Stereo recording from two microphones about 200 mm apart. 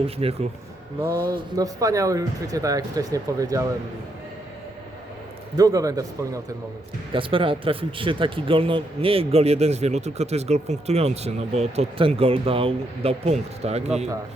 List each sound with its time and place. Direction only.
0.0 s speech: 30° right (ahead or behind)
1.1 s speech: 50° right (ahead or behind)
1.5 s speech: 15° right (ahead or behind)
5.5 s speech: 20° right (ahead or behind); by 14.1 s 35° right (ahead or behind)